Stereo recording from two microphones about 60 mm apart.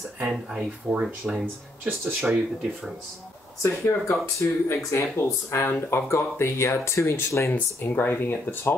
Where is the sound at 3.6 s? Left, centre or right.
Left.